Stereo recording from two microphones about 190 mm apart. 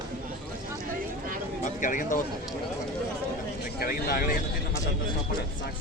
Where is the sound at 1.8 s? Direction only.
45° left (ahead or behind).